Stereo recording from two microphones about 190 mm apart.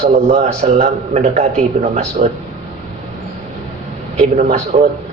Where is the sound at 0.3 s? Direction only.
40° right (ahead or behind).